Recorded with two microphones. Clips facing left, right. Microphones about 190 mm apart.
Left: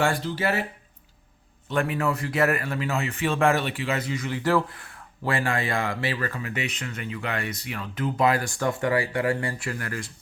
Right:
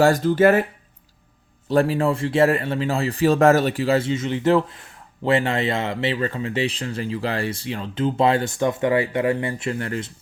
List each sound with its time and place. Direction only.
0.0 s speech: 45° right (ahead or behind)
1.7 s speech: 35° right (ahead or behind)